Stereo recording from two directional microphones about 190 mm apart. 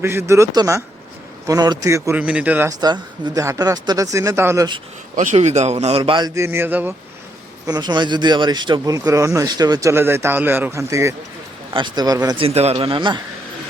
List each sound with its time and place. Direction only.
0.0 s speech: 15° right (ahead or behind)
2.8 s speech: 20° right (ahead or behind)
5.1 s a man's voice: 40° right (ahead or behind); by 6.9 s 10° right (ahead or behind)
7.7 s a man's voice: 20° right (ahead or behind)
12.5 s a man's voice: 30° right (ahead or behind)